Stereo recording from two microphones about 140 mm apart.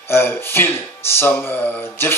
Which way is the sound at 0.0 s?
15° left (ahead or behind).